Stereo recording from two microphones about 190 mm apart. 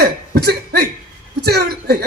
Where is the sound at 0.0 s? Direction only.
60° right (ahead or behind).